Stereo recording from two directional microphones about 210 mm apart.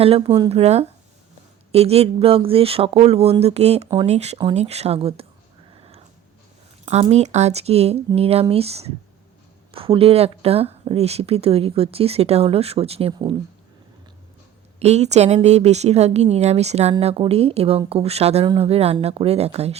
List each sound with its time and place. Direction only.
0.4 s speech: 30° right (ahead or behind)
6.8 s speech: 30° right (ahead or behind)
14.8 s speech: 30° right (ahead or behind)